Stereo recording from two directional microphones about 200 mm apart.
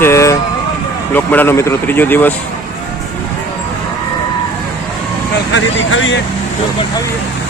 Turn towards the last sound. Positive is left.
turn(degrees=75)  # may be behind; listen again after turning